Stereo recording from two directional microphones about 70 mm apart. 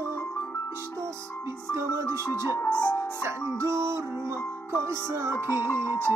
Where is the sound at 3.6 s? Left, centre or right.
Right.